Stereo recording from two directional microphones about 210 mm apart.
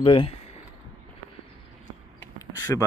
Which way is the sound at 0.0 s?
25° left (ahead or behind).